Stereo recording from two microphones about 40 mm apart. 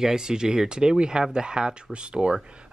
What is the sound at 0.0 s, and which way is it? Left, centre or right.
Speech, centre.